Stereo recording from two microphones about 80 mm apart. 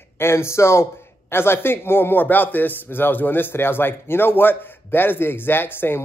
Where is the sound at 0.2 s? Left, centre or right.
Left.